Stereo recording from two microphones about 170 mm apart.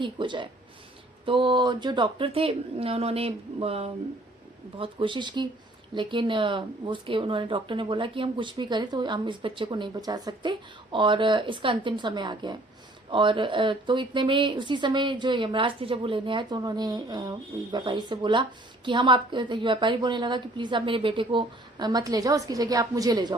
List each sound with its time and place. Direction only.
0.0 s a woman's voice: 30° right (ahead or behind)